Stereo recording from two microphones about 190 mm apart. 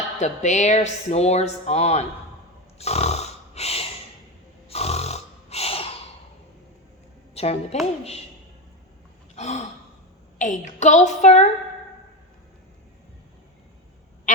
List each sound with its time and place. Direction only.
0.2 s speech: 40° left (ahead or behind)
2.7 s a sound: 35° left (ahead or behind)
4.7 s snoring: 35° left (ahead or behind)
7.3 s a woman's voice: 35° left (ahead or behind)
9.3 s gasp: 35° left (ahead or behind)
10.3 s speech: 40° left (ahead or behind)
14.3 s duck: 40° left (ahead or behind)